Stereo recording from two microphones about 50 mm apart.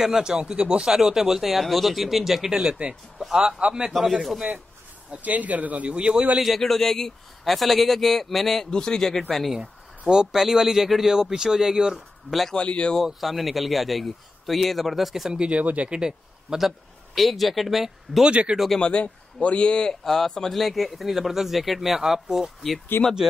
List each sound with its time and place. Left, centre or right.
0.0 s speech: centre
3.9 s speech: centre
5.1 s a man's voice: right
6.4 s speech: centre
8.6 s speech: centre
9.6 s speech: centre
12.5 s speech: left
13.0 s speech: centre
15.5 s speech: right
16.0 s a man's voice: centre
18.2 s speech: right
18.8 s speech: left; by 22.5 s centre
23.0 s speech: left